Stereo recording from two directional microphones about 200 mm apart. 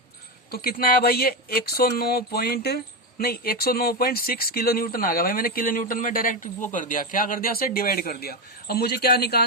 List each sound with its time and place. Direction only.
0.5 s speech: 50° left (ahead or behind)